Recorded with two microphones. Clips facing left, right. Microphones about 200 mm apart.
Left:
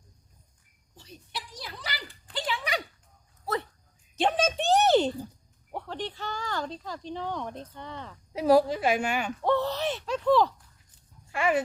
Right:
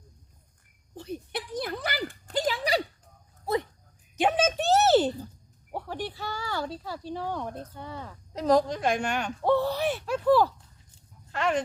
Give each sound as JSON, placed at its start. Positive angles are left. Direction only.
{"t": 0.9, "sound": "a sound", "side_deg": -55}
{"t": 3.4, "sound": "a sound", "side_deg": -15}
{"t": 7.7, "sound": "speech", "side_deg": -5}
{"t": 8.3, "sound": "a woman's voice", "side_deg": 10}
{"t": 9.4, "sound": "speech", "side_deg": -10}
{"t": 11.3, "sound": "speech", "side_deg": 10}